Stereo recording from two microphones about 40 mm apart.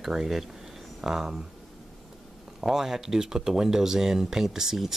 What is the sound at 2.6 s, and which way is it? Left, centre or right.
Speech, centre.